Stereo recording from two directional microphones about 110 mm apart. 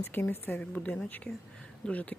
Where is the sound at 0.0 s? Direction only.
20° left (ahead or behind).